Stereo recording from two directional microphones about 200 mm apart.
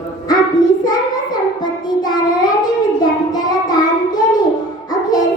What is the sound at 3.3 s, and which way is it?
Child singing, 20° left (ahead or behind).